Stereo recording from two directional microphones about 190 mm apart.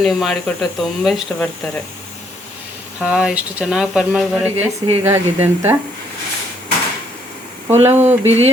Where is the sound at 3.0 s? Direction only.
5° right (ahead or behind).